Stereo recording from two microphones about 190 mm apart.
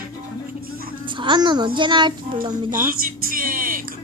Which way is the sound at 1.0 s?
25° right (ahead or behind).